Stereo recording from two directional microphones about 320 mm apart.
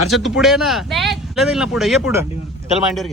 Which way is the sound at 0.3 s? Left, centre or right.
Centre.